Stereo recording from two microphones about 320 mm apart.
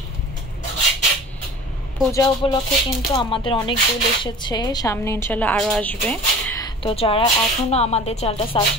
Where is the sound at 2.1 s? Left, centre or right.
Centre.